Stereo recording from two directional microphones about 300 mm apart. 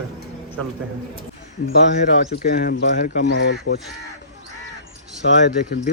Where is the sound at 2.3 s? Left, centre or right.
Left.